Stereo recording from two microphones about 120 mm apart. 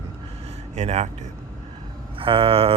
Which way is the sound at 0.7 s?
70° right (ahead or behind).